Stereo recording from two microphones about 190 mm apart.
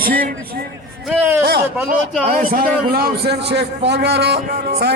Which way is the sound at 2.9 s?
55° right (ahead or behind).